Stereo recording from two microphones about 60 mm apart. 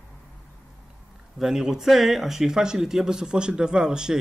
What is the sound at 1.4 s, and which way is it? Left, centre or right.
Speech, centre.